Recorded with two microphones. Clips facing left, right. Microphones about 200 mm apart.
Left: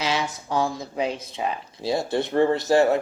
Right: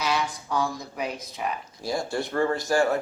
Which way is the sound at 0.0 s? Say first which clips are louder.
Left 1 dB; 25° left (ahead or behind).